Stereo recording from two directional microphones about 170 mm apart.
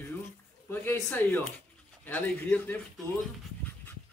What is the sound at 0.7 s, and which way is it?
A woman's voice, 10° left (ahead or behind).